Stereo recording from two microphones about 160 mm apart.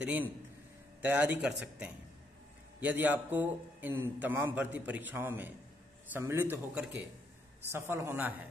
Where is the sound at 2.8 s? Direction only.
10° right (ahead or behind).